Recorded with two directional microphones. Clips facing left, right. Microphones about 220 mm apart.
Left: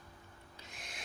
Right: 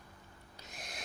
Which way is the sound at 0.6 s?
40° right (ahead or behind).